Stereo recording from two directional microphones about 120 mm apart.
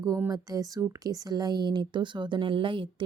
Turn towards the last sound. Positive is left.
turn(degrees=-45)  # may be behind; listen again after turning